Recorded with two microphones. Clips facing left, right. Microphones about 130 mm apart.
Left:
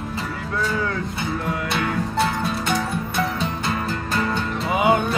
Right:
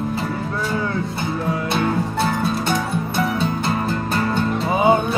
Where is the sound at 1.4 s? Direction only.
30° right (ahead or behind).